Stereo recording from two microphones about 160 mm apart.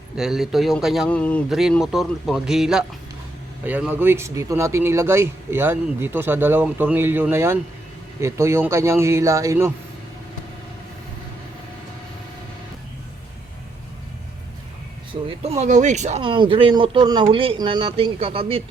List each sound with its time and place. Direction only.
0.2 s speech: centre (ahead or behind)
1.0 s speech: 10° left (ahead or behind)
1.5 s speech: centre (ahead or behind); by 9.7 s 20° right (ahead or behind)
15.3 s speech: 40° right (ahead or behind)
16.2 s speech: 30° right (ahead or behind)